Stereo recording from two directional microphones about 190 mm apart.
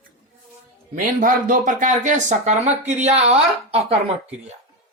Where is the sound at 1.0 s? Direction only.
45° right (ahead or behind).